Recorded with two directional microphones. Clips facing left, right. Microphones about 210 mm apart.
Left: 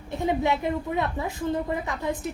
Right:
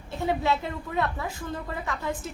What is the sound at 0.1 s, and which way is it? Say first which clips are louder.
A woman's voice: left 2 dB; 20° left (ahead or behind).